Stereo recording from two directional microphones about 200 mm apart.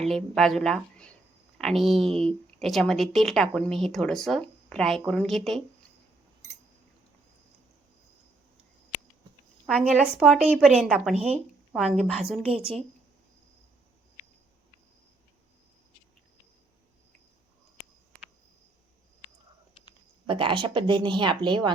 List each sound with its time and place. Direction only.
0.1 s speech: centre (ahead or behind)
9.6 s speech: 5° right (ahead or behind)
12.5 s speech: 30° right (ahead or behind)
20.2 s speech: 25° right (ahead or behind)